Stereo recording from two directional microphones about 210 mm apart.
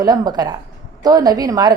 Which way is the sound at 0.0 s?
20° right (ahead or behind).